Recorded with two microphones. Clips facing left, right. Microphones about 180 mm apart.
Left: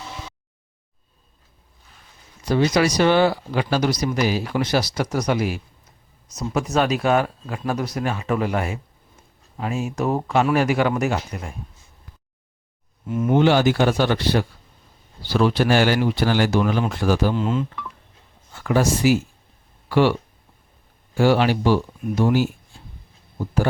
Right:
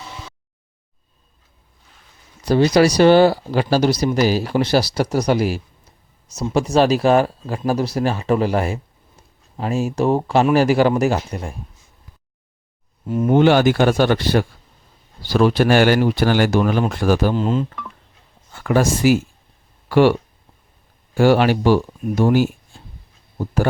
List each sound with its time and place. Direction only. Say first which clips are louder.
2.4 s speech: right 5 dB; 35° right (ahead or behind)
13.1 s speech: right 3 dB; 35° right (ahead or behind)
13.3 s speech: right 3 dB; 55° right (ahead or behind)
17.3 s speech: right 3 dB; 35° right (ahead or behind)
18.5 s speech: right 2 dB; 50° right (ahead or behind)
21.2 s speech: right 3 dB; 55° right (ahead or behind)